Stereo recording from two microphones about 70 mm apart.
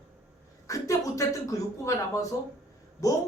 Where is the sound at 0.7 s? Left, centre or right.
Left.